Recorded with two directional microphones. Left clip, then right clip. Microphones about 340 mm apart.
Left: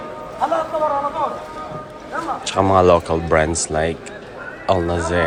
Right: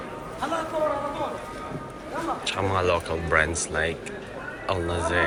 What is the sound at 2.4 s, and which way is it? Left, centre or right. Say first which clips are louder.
Speech: left 12 dB; centre.